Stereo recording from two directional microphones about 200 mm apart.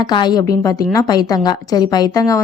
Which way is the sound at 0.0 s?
20° left (ahead or behind).